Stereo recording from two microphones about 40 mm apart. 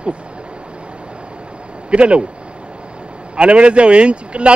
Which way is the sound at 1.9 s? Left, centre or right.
Right.